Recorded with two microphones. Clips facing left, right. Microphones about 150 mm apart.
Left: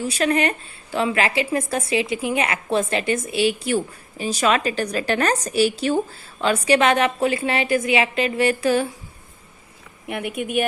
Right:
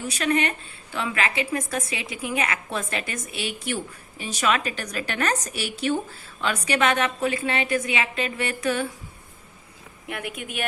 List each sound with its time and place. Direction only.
0.2 s a woman's voice: 40° left (ahead or behind)
10.1 s a woman's voice: 25° left (ahead or behind)